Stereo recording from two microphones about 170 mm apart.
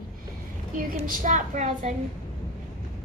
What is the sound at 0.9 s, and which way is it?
Speech, 50° right (ahead or behind).